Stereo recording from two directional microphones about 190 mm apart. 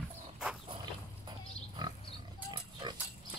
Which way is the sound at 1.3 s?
25° right (ahead or behind).